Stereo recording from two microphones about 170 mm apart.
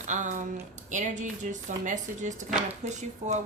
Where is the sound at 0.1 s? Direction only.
45° right (ahead or behind).